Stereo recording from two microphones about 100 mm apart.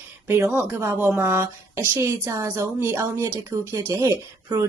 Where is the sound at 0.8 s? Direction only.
15° right (ahead or behind).